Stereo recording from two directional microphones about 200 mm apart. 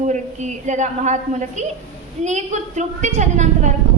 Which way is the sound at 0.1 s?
35° right (ahead or behind).